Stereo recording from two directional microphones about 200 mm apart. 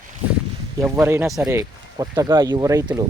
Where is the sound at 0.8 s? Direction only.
10° right (ahead or behind).